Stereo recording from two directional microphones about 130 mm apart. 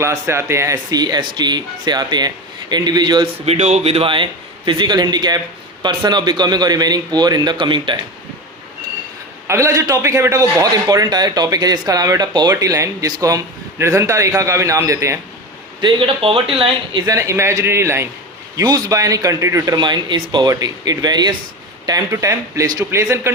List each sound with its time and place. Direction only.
0.0 s speech: 20° right (ahead or behind)
3.4 s speech: 55° right (ahead or behind); by 7.9 s 40° right (ahead or behind)
9.5 s a man's voice: 20° right (ahead or behind)
15.8 s speech: 40° right (ahead or behind)
17.1 s a man's voice: 25° right (ahead or behind)